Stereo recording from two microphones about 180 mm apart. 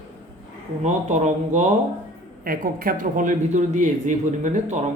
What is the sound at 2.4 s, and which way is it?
Speech, 50° right (ahead or behind).